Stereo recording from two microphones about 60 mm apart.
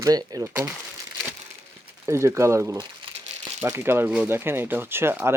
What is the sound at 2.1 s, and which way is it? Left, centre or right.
Speech, right.